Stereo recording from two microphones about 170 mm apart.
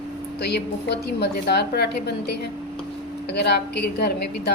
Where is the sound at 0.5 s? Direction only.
75° left (ahead or behind).